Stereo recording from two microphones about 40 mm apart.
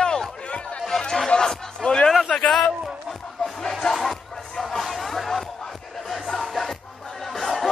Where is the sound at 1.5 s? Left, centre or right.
Centre.